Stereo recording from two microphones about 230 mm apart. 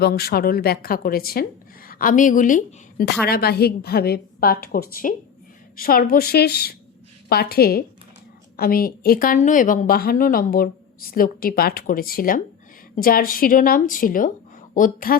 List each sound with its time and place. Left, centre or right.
0.0 s a woman's voice: left